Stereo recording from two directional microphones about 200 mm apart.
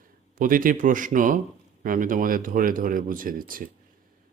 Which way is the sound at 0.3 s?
45° right (ahead or behind).